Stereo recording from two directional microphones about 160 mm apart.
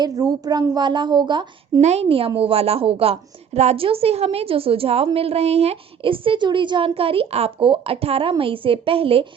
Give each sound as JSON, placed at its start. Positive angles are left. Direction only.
{"t": 0.0, "sound": "a woman's voice", "side_deg": -25}
{"t": 1.8, "sound": "a woman's voice", "side_deg": -40}